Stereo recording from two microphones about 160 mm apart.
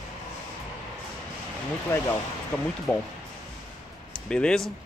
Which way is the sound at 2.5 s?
10° left (ahead or behind).